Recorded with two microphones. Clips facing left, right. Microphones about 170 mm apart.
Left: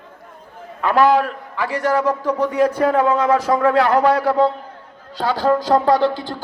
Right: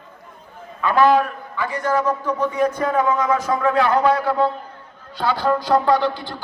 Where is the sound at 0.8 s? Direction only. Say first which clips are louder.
Left 1 dB; 70° left (ahead or behind).